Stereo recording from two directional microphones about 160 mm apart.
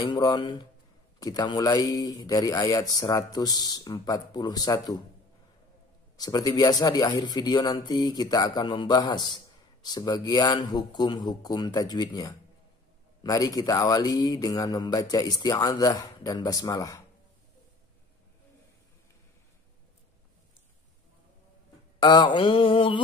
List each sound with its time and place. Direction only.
0.0 s a man's voice: 25° left (ahead or behind)
6.1 s a man's voice: 25° left (ahead or behind)
22.0 s mantra: 30° left (ahead or behind)